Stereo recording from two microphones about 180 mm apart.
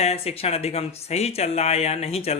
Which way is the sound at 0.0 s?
35° left (ahead or behind).